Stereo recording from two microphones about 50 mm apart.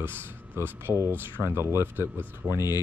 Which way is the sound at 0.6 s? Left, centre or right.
Right.